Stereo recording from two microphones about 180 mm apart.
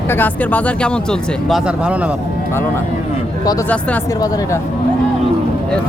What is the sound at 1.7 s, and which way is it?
Speech, 5° right (ahead or behind).